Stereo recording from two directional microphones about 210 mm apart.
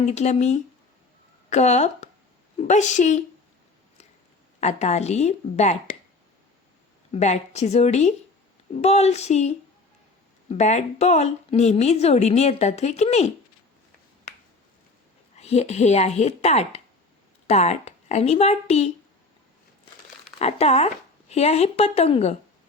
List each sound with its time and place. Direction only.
0.0 s a woman's voice: 35° left (ahead or behind)
4.6 s a woman's voice: 30° left (ahead or behind)
7.1 s a woman's voice: 30° left (ahead or behind)
15.4 s a woman's voice: 30° left (ahead or behind)
20.4 s a woman's voice: 30° left (ahead or behind)